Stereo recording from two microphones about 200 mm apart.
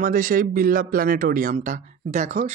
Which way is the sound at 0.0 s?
45° right (ahead or behind).